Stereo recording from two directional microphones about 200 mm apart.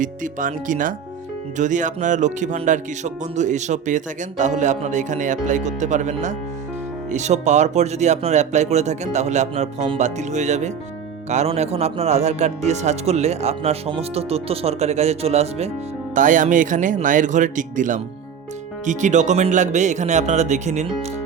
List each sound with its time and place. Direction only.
0.0 s speech: 40° right (ahead or behind)